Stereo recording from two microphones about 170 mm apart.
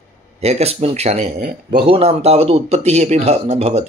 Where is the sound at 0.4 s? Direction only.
40° right (ahead or behind).